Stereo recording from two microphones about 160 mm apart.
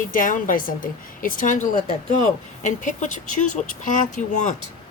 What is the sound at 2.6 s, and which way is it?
Speech, 50° left (ahead or behind).